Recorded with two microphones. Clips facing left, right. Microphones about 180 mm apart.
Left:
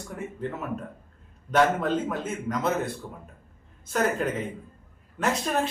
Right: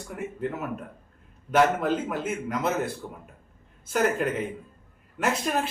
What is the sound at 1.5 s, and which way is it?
A man's voice, 5° right (ahead or behind).